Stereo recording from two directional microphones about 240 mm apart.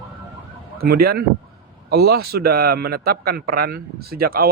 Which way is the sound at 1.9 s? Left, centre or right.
Right.